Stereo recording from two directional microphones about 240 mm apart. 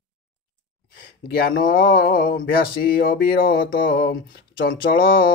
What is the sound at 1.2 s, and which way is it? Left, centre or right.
Speech, left.